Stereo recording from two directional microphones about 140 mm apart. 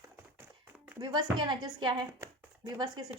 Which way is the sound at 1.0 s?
30° right (ahead or behind).